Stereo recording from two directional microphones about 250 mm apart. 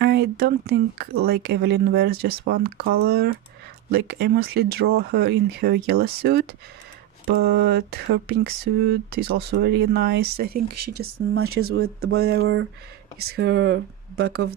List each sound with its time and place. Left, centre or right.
0.0 s speech: right
10.7 s speech: right
11.5 s speech: right
12.1 s speech: right